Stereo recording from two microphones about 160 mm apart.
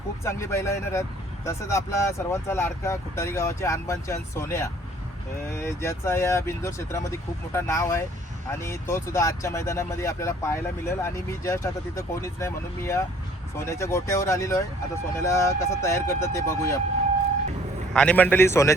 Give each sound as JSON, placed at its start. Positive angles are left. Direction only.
{"t": 0.3, "sound": "speech", "side_deg": 15}
{"t": 17.9, "sound": "speech", "side_deg": 10}